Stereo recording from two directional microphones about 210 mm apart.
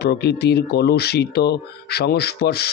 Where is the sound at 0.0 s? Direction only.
50° left (ahead or behind).